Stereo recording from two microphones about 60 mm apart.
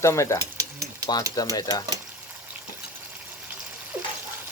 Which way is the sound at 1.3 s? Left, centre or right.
Left.